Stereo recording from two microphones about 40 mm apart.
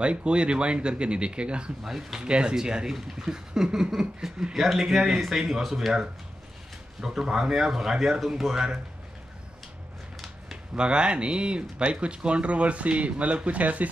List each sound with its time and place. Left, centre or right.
0.0 s speech: right
1.9 s speech: centre
2.2 s speech: right
2.9 s speech: centre
4.6 s speech: centre
7.0 s speech: centre
10.8 s speech: right